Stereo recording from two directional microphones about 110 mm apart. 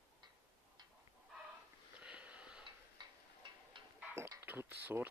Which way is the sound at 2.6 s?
50° right (ahead or behind).